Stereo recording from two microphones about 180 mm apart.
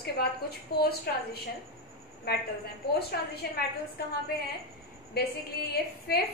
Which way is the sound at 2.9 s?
60° left (ahead or behind).